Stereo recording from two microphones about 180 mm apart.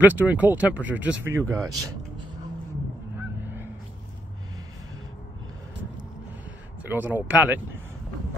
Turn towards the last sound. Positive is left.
turn(degrees=-10)  # may be behind; listen again after turning